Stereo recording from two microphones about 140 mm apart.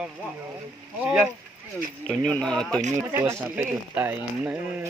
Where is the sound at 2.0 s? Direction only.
5° left (ahead or behind).